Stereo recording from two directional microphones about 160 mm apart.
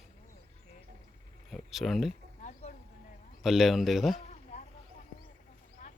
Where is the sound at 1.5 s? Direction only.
Centre (ahead or behind).